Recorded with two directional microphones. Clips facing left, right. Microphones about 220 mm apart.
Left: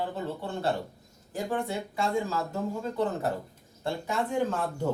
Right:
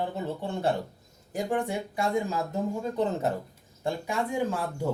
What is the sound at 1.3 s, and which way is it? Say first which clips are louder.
Speech: right 2 dB; 15° right (ahead or behind).